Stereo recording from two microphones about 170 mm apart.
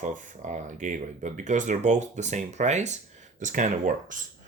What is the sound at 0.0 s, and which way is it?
Speech, 50° right (ahead or behind).